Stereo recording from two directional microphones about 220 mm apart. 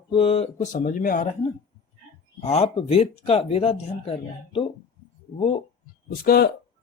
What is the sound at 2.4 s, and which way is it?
Speech, 25° left (ahead or behind).